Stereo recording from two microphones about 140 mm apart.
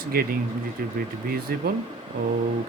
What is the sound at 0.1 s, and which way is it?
Speech, 90° right.